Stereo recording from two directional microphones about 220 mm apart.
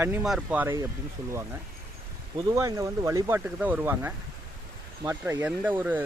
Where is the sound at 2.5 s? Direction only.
15° right (ahead or behind).